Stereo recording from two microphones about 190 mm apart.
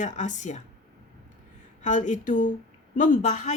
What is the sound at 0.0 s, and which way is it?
Speech, 40° left (ahead or behind).